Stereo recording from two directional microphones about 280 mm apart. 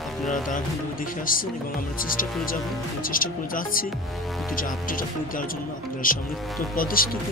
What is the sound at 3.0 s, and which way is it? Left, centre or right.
Speech, left.